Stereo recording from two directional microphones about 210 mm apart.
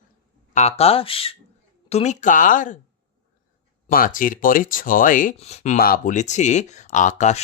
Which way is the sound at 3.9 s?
40° left (ahead or behind).